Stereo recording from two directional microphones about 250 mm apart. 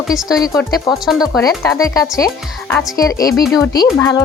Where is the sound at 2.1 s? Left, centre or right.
Centre.